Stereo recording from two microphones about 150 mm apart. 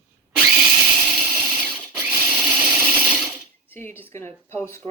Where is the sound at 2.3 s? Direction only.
5° right (ahead or behind).